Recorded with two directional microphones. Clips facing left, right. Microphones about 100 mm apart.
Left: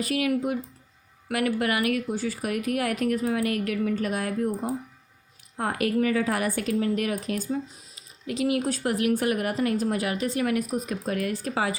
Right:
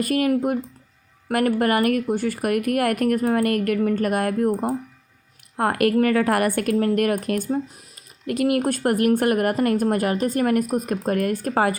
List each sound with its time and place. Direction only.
0.0 s a woman's voice: 45° right (ahead or behind)